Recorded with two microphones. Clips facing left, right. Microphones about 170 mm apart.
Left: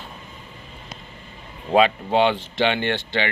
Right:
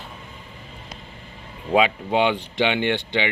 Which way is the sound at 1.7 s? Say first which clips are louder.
Left 2 dB; 10° right (ahead or behind).